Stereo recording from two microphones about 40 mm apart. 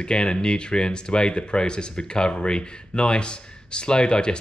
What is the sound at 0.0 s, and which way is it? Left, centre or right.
Speech, left.